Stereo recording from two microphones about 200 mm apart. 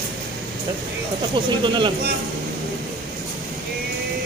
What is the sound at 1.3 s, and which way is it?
Speech, 25° right (ahead or behind).